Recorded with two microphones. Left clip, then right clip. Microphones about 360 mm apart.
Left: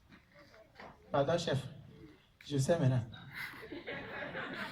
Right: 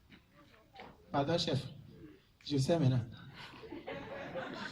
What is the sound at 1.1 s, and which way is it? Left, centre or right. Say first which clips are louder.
A woman's voice: left 1 dB; centre.